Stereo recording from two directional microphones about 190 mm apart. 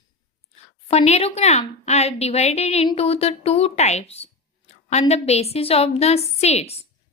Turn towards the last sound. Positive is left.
turn(degrees=35)  # may be behind; listen again after turning